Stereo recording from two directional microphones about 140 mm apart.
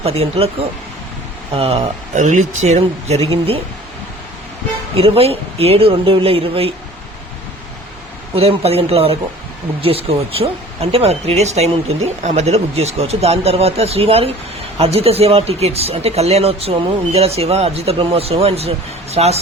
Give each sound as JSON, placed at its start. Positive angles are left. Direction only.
{"t": 0.0, "sound": "speech", "side_deg": -45}
{"t": 1.5, "sound": "speech", "side_deg": -45}
{"t": 2.1, "sound": "speech", "side_deg": -60}
{"t": 4.9, "sound": "speech", "side_deg": -45}
{"t": 8.4, "sound": "speech", "side_deg": -45}